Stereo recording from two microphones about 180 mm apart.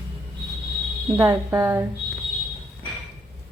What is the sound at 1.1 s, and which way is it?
Speech, 10° right (ahead or behind).